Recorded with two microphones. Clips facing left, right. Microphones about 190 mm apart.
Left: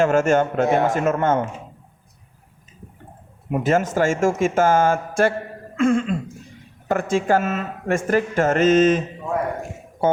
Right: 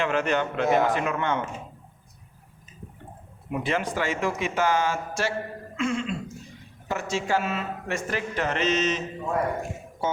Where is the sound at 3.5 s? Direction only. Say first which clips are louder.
Left 7 dB; 45° left (ahead or behind).